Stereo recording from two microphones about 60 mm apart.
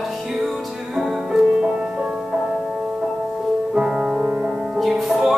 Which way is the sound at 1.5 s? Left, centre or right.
Centre.